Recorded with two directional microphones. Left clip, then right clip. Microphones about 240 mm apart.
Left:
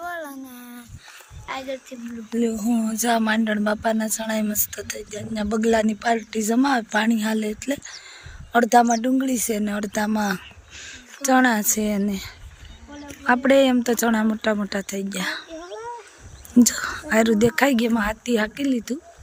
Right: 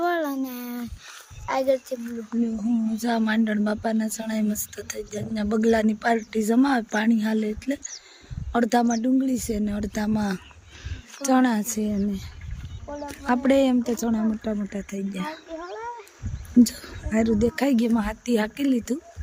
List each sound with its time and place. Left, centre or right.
0.0 s a sound: right
1.5 s speech: right
2.9 s a woman's voice: centre
14.2 s speech: centre
15.1 s a woman's voice: centre
16.6 s a woman's voice: centre